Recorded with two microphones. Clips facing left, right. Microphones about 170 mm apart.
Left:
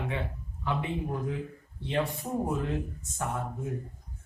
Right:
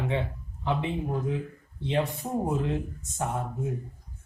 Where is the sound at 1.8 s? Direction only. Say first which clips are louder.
Right 2 dB; 20° right (ahead or behind).